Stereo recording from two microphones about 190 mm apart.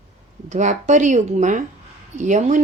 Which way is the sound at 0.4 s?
40° right (ahead or behind).